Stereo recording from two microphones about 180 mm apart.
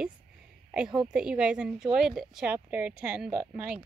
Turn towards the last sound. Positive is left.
turn(degrees=-5)  # may be behind; listen again after turning